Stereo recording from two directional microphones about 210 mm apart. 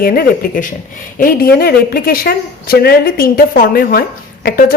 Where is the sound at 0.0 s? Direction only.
45° left (ahead or behind).